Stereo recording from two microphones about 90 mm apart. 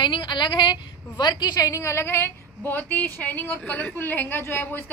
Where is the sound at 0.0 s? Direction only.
60° left (ahead or behind).